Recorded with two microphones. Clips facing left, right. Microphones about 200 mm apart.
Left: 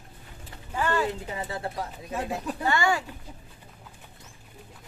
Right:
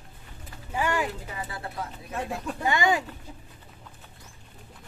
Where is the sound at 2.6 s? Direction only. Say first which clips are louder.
Right 1 dB; 20° right (ahead or behind).